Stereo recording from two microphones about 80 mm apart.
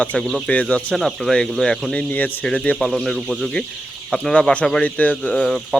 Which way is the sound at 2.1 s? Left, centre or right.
Left.